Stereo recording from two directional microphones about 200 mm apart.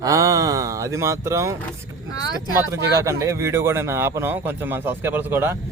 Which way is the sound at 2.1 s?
20° left (ahead or behind).